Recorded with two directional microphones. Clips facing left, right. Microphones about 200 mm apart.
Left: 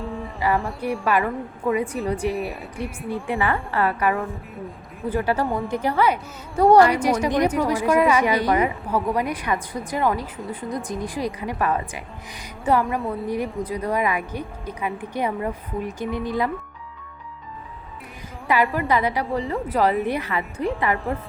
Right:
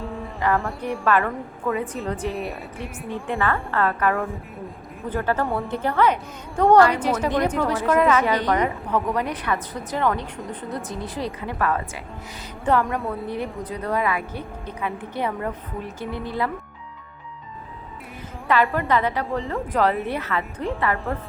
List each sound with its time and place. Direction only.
0.0 s music: centre (ahead or behind)
0.6 s speech: centre (ahead or behind)
1.0 s a woman's voice: 15° left (ahead or behind)
2.3 s speech: centre (ahead or behind)
3.2 s a woman's voice: 15° left (ahead or behind)
12.8 s speech: centre (ahead or behind)
13.1 s a woman's voice: 10° left (ahead or behind)
18.4 s a woman's voice: 15° left (ahead or behind)